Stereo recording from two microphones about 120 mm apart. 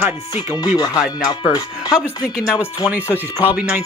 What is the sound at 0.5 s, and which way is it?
Speech, 35° left (ahead or behind).